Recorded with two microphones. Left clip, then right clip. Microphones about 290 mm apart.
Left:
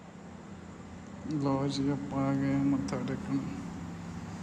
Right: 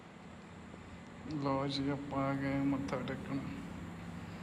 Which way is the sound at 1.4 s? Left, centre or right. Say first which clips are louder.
Left 4 dB; centre.